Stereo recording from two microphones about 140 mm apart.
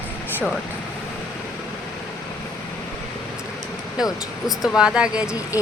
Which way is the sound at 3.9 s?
5° right (ahead or behind).